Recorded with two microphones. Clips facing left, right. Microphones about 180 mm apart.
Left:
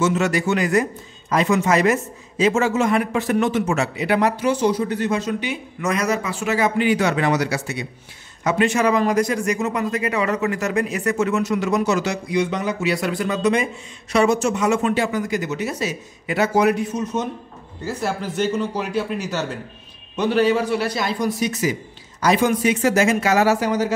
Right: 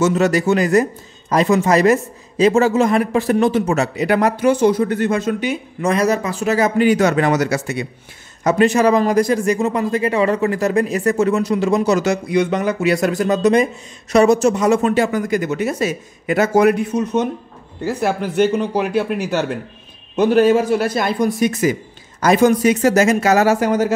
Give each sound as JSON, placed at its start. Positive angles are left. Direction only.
{"t": 0.0, "sound": "a man's voice", "side_deg": -35}
{"t": 5.8, "sound": "speech", "side_deg": -30}
{"t": 8.5, "sound": "a man's voice", "side_deg": -40}
{"t": 12.0, "sound": "speech", "side_deg": -55}
{"t": 20.2, "sound": "speech", "side_deg": -50}